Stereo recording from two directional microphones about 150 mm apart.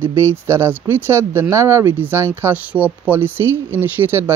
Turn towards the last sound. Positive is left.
turn(degrees=-15)  # may be behind; listen again after turning